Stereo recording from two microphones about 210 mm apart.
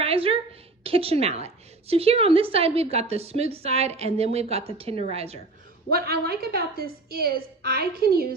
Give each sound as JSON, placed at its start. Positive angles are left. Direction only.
{"t": 0.0, "sound": "a woman's voice", "side_deg": -25}
{"t": 5.9, "sound": "a woman's voice", "side_deg": -45}